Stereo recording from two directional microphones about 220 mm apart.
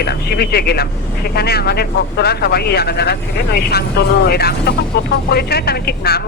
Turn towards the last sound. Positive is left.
turn(degrees=45)  # may be behind; listen again after turning